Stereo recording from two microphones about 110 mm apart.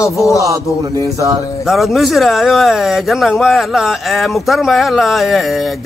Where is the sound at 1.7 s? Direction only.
Centre (ahead or behind).